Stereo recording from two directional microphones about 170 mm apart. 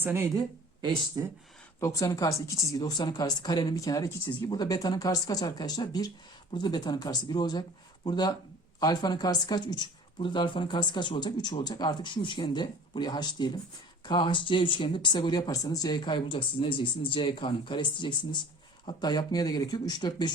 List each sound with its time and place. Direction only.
0.0 s speech: 15° right (ahead or behind)
1.8 s speech: 20° left (ahead or behind)